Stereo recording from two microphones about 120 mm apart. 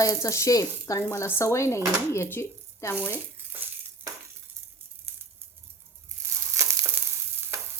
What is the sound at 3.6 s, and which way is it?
Crushing, 15° right (ahead or behind).